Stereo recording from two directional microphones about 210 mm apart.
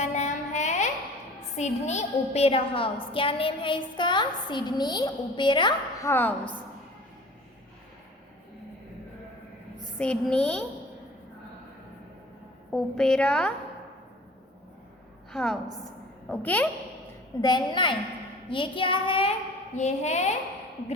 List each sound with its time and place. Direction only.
0.0 s a sound: 35° left (ahead or behind)
1.5 s a woman's voice: 35° left (ahead or behind); by 6.3 s 10° left (ahead or behind)
10.0 s a woman's voice: 5° left (ahead or behind)
12.7 s a woman's voice: 5° left (ahead or behind)
15.3 s a woman's voice: centre (ahead or behind)
17.4 s a woman's voice: 20° left (ahead or behind)